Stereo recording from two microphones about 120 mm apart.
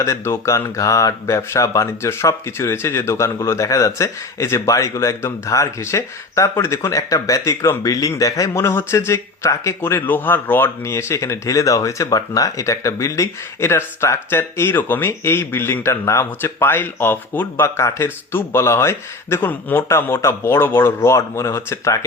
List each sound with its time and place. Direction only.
0.0 s speech: 25° left (ahead or behind)